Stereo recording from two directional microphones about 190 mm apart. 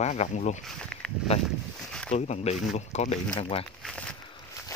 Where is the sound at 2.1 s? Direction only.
35° left (ahead or behind).